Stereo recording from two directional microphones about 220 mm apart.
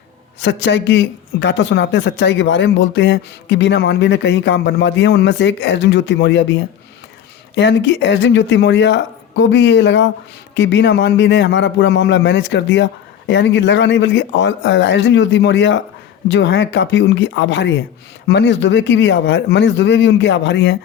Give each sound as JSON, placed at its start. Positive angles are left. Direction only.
{"t": 0.4, "sound": "a woman's voice", "side_deg": 55}